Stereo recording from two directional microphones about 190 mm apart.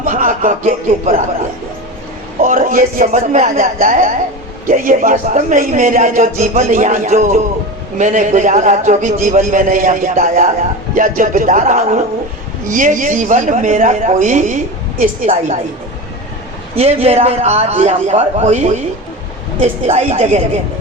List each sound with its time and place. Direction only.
0.0 s a man's voice: 45° right (ahead or behind)
2.4 s a man's voice: 45° right (ahead or behind)
16.7 s a man's voice: 30° right (ahead or behind)